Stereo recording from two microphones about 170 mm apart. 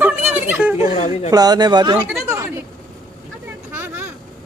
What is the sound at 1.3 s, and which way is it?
Speech, 25° right (ahead or behind).